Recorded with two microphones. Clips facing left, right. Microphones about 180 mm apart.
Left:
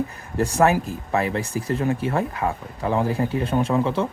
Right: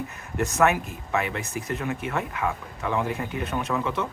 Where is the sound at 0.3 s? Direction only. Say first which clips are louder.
Left 3 dB; 30° left (ahead or behind).